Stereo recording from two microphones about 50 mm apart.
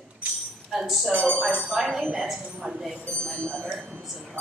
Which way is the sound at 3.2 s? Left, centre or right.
Centre.